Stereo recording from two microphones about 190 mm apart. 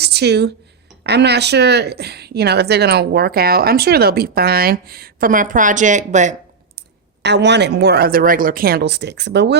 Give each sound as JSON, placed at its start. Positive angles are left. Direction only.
{"t": 0.0, "sound": "a woman's voice", "side_deg": -60}
{"t": 6.7, "sound": "a woman's voice", "side_deg": -65}